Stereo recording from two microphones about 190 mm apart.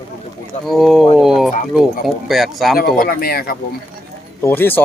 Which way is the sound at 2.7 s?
50° left (ahead or behind).